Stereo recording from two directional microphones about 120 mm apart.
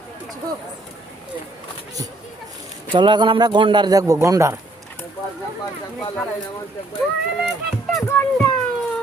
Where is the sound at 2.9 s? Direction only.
40° right (ahead or behind).